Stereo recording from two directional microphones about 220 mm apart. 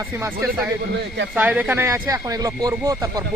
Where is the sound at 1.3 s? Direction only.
5° right (ahead or behind).